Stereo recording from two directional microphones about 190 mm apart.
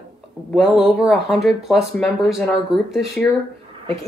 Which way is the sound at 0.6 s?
Centre (ahead or behind).